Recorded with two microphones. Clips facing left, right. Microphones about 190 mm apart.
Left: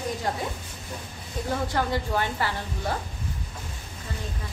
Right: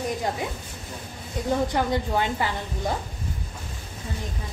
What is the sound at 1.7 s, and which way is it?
A woman's voice, 15° right (ahead or behind).